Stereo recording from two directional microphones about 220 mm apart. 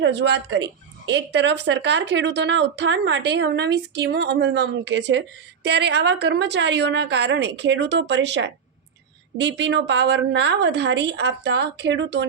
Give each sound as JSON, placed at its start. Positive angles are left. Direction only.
{"t": 0.0, "sound": "speech", "side_deg": -50}